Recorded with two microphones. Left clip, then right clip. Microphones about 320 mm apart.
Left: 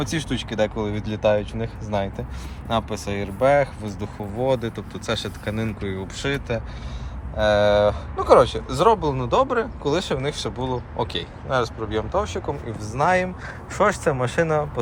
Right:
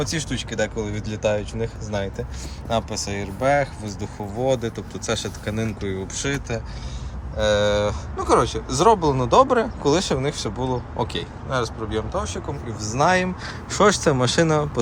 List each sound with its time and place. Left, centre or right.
0.0 s speech: centre